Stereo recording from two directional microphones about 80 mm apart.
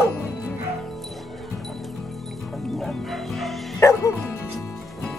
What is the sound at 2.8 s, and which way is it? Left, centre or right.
Music, centre.